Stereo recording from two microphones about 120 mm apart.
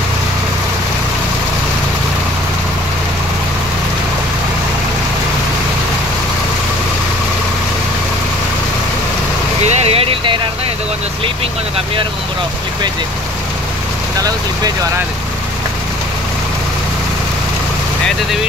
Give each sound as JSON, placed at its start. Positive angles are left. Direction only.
{"t": 9.7, "sound": "vehicle", "side_deg": -55}